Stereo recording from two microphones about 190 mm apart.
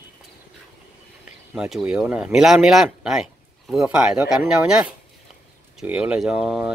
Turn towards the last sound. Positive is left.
turn(degrees=-5)  # may be behind; listen again after turning